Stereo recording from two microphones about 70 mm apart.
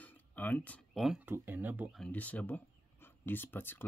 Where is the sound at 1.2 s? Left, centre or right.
Right.